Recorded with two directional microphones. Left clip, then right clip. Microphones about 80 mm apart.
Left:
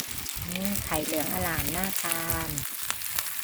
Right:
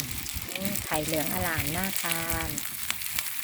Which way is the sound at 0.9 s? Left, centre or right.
Centre.